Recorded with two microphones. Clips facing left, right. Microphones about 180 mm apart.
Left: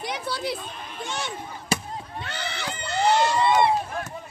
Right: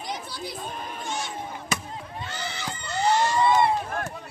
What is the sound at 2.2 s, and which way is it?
Crowd, 65° left (ahead or behind).